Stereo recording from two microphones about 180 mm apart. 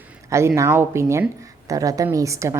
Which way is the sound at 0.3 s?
15° right (ahead or behind).